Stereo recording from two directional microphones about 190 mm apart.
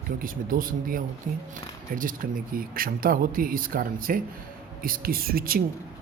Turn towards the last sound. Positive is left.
turn(degrees=-50)  # may be behind; listen again after turning